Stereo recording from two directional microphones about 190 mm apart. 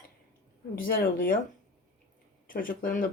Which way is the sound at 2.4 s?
45° left (ahead or behind).